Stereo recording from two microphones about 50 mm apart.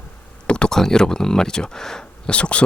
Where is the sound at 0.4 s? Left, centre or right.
Left.